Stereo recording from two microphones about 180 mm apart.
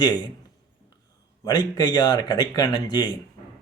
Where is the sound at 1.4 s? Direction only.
20° left (ahead or behind).